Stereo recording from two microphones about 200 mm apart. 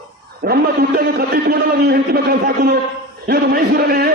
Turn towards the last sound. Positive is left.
turn(degrees=-50)  # may be behind; listen again after turning